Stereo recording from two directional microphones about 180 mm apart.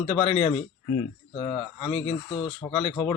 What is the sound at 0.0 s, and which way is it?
Speech, 30° left (ahead or behind).